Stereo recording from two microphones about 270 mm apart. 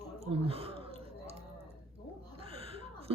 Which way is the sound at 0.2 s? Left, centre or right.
Right.